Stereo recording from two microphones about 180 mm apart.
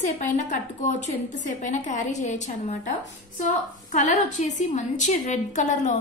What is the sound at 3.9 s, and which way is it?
A woman's voice, 40° left (ahead or behind).